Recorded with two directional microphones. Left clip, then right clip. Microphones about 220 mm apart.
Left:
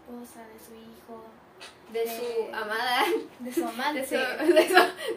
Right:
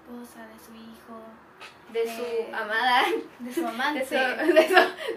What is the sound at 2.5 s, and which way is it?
Speech, 15° left (ahead or behind).